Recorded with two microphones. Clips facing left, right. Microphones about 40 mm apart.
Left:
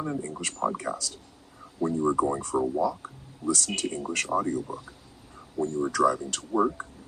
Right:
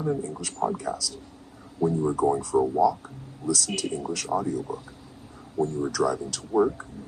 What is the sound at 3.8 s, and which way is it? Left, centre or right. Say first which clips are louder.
Speech: even; left.